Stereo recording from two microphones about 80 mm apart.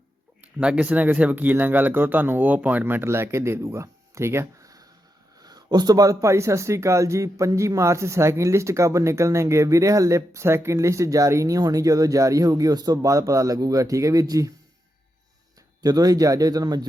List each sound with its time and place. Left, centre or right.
0.4 s speech: centre; by 4.7 s right
5.4 s speech: right
15.8 s speech: right